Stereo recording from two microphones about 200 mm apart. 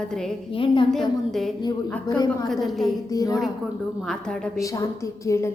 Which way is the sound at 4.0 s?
5° left (ahead or behind).